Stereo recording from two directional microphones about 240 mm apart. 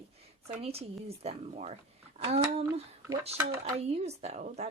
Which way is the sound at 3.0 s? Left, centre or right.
Centre.